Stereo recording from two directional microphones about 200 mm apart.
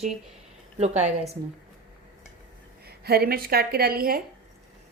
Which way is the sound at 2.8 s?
50° right (ahead or behind).